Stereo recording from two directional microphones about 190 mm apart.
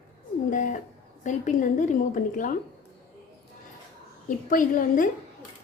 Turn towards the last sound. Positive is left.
turn(degrees=45)  # may be behind; listen again after turning